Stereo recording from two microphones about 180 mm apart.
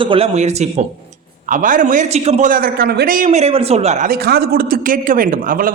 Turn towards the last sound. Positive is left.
turn(degrees=-50)  # may be behind; listen again after turning